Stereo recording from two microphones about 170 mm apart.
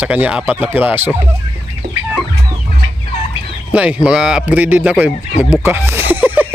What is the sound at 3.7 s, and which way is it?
Speech, 5° right (ahead or behind).